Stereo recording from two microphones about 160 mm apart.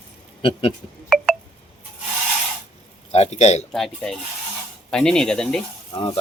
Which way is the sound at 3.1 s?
40° left (ahead or behind).